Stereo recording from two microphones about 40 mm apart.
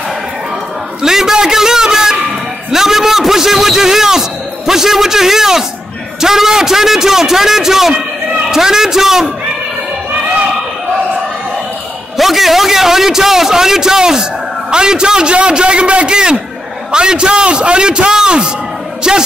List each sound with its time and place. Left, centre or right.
1.0 s a sound: centre
2.7 s a man's voice: centre
12.2 s a man's voice: centre